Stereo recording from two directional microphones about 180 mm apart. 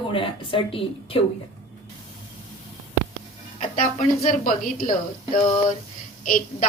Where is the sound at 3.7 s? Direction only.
45° left (ahead or behind).